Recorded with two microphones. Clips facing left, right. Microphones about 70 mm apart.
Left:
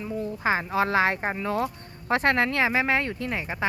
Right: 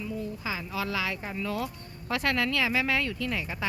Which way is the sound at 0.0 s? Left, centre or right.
Left.